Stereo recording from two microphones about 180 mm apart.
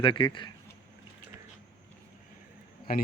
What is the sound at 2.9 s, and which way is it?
Speech, 55° left (ahead or behind).